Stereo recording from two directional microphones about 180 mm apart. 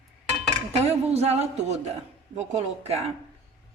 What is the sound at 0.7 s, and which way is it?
A woman's voice, 35° right (ahead or behind).